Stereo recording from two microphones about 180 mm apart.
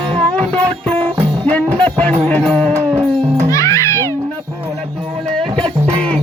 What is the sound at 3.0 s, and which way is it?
Music, 15° right (ahead or behind).